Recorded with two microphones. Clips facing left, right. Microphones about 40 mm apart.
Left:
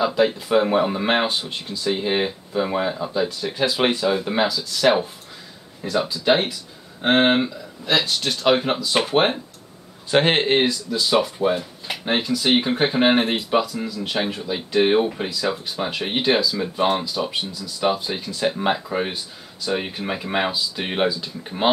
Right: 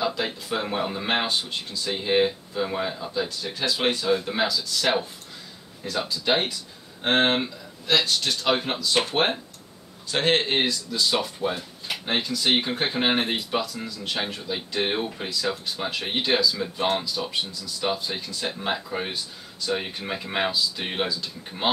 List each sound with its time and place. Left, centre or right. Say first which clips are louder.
0.0 s speech: left 8 dB; centre
10.2 s speech: right 1 dB; centre
10.6 s speech: left 3 dB; centre